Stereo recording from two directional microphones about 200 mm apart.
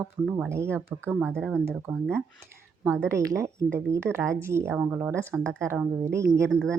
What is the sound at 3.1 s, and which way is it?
Speech, 15° right (ahead or behind).